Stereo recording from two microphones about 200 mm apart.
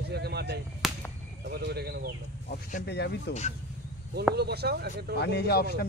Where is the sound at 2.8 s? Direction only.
55° left (ahead or behind).